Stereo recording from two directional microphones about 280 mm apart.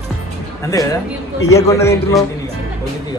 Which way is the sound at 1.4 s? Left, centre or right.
Centre.